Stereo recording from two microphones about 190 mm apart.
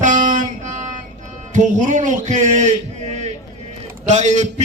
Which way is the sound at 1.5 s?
40° right (ahead or behind).